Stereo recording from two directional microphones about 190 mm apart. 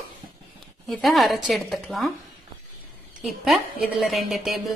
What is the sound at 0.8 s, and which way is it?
A woman's voice, centre (ahead or behind).